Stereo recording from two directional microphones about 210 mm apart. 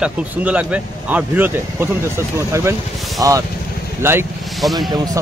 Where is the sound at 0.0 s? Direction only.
5° right (ahead or behind).